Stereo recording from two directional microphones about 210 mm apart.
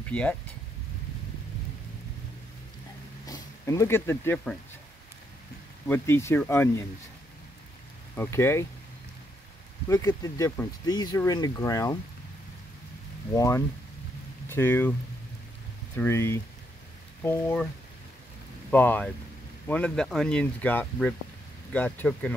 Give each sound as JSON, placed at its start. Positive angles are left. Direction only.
{"t": 0.1, "sound": "speech", "side_deg": 5}
{"t": 3.3, "sound": "speech", "side_deg": 15}
{"t": 5.9, "sound": "speech", "side_deg": 10}
{"t": 8.2, "sound": "speech", "side_deg": 10}
{"t": 9.8, "sound": "speech", "side_deg": 15}
{"t": 13.3, "sound": "speech", "side_deg": 15}
{"t": 16.0, "sound": "speech", "side_deg": 10}
{"t": 18.7, "sound": "speech", "side_deg": 10}